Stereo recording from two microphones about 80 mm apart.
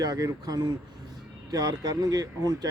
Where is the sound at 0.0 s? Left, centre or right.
Right.